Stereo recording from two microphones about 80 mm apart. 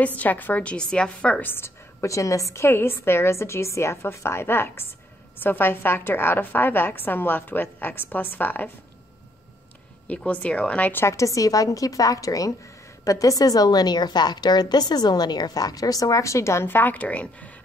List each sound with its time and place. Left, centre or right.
0.0 s a woman's voice: centre
1.4 s a woman's voice: left
10.0 s a woman's voice: centre
11.1 s a woman's voice: left; by 17.5 s centre